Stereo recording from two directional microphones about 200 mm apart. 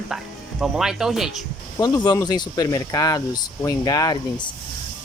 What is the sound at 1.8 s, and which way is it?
Speech, 20° left (ahead or behind).